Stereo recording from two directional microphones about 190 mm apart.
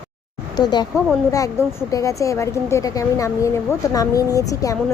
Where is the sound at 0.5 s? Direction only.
20° left (ahead or behind).